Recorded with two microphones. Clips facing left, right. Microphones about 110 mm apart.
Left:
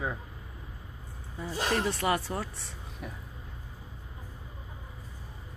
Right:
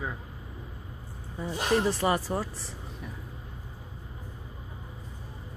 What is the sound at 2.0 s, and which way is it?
Speech, 30° right (ahead or behind).